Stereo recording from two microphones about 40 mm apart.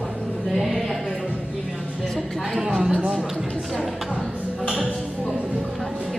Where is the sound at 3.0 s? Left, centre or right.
Centre.